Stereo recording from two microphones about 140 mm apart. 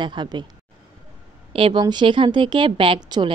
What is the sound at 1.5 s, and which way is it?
A woman's voice, 40° right (ahead or behind).